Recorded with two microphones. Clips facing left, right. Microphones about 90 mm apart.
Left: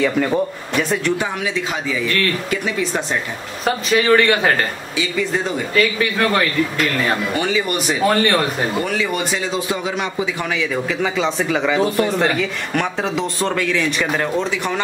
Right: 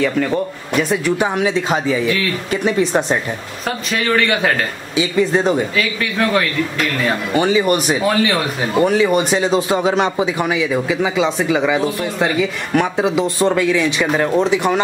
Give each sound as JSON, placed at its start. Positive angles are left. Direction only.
{"t": 0.0, "sound": "a man's voice", "side_deg": 5}
{"t": 1.4, "sound": "speech", "side_deg": -35}
{"t": 2.0, "sound": "speech", "side_deg": -5}
{"t": 2.8, "sound": "speech", "side_deg": -25}
{"t": 3.6, "sound": "a man's voice", "side_deg": 0}
{"t": 5.8, "sound": "a man's voice", "side_deg": 0}
{"t": 7.3, "sound": "speech", "side_deg": -20}
{"t": 8.0, "sound": "a man's voice", "side_deg": 0}
{"t": 8.7, "sound": "speech", "side_deg": -30}
{"t": 10.2, "sound": "speech", "side_deg": -15}